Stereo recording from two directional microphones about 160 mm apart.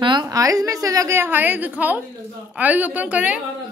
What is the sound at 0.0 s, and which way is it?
A woman's voice, 25° right (ahead or behind).